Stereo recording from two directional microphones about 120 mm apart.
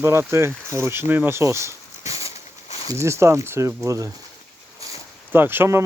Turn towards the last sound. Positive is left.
turn(degrees=-20)  # may be behind; listen again after turning